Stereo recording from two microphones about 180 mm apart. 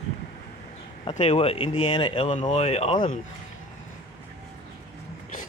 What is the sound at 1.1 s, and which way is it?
Speech, 40° left (ahead or behind).